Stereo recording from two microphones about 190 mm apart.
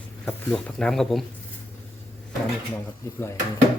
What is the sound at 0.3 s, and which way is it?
Speech, 5° left (ahead or behind).